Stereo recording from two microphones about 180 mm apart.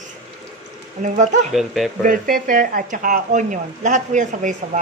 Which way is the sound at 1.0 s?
40° right (ahead or behind).